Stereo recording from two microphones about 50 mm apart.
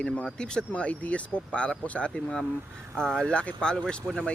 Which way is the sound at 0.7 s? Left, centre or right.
Left.